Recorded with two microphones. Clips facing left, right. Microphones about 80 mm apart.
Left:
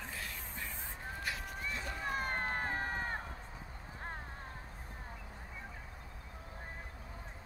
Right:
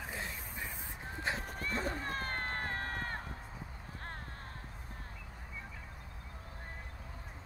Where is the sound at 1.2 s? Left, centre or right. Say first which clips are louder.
Right 5 dB; right.